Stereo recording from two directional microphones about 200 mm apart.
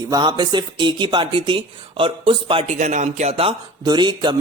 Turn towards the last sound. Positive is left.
turn(degrees=-20)  # may be behind; listen again after turning